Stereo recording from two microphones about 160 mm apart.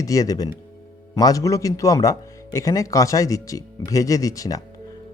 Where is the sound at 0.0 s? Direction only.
20° left (ahead or behind).